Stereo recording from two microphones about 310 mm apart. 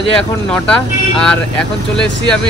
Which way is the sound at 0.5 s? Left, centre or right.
Centre.